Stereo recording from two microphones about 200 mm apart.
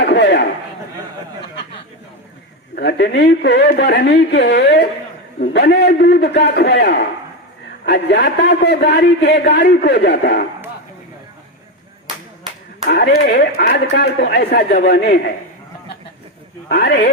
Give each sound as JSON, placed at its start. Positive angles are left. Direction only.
{"t": 0.0, "sound": "a sound", "side_deg": 55}
{"t": 2.7, "sound": "a man's voice", "side_deg": 55}
{"t": 12.9, "sound": "speech", "side_deg": 55}
{"t": 13.7, "sound": "a man's voice", "side_deg": 55}
{"t": 16.6, "sound": "a man's voice", "side_deg": 55}